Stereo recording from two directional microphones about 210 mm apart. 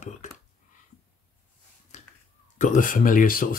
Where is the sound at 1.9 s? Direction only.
35° left (ahead or behind).